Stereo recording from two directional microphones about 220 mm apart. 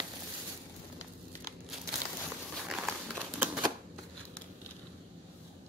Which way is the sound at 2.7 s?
5° right (ahead or behind).